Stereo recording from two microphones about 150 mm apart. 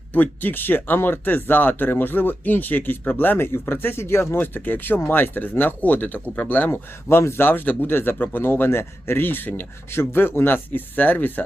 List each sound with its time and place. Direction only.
0.1 s speech: 10° left (ahead or behind)